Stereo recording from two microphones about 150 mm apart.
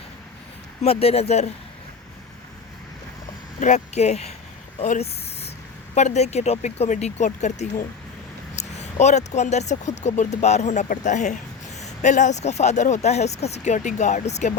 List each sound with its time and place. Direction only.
0.8 s speech: 40° left (ahead or behind)
3.6 s speech: 50° left (ahead or behind)